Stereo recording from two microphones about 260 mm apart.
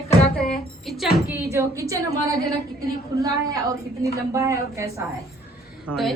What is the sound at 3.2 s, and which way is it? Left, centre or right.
A woman's voice, centre.